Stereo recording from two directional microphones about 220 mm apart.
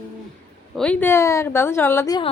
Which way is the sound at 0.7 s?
5° left (ahead or behind).